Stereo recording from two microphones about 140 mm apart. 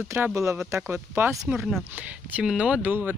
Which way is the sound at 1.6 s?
Centre (ahead or behind).